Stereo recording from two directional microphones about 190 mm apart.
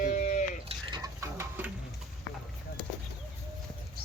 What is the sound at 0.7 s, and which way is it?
Water, 25° right (ahead or behind).